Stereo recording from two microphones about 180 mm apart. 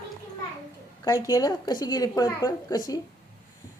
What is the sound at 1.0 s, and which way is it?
A woman's voice, 15° left (ahead or behind).